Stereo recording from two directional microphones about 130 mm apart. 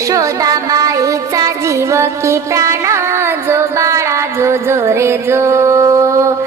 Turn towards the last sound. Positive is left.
turn(degrees=-25)  # may be behind; listen again after turning